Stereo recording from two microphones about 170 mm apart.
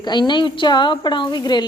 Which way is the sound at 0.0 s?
25° left (ahead or behind).